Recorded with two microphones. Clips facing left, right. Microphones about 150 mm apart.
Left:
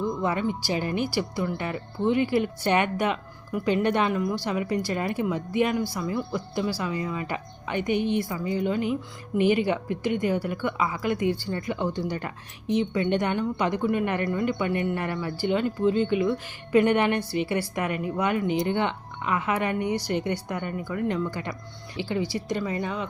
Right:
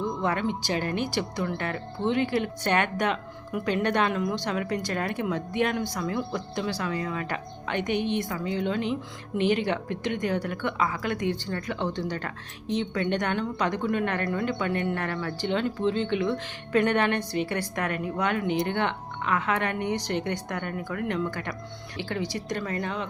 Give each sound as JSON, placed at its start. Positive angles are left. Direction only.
{"t": 0.2, "sound": "speech", "side_deg": 5}
{"t": 7.9, "sound": "a woman's voice", "side_deg": 50}
{"t": 8.2, "sound": "speech", "side_deg": 5}
{"t": 18.4, "sound": "speech", "side_deg": -60}
{"t": 18.7, "sound": "speech", "side_deg": 10}